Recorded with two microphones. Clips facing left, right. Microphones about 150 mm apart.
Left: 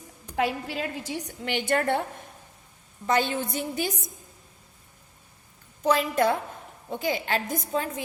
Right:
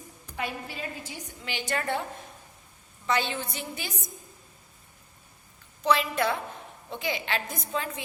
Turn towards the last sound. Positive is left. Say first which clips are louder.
# left 4 dB
turn(degrees=40)  # may be behind; listen again after turning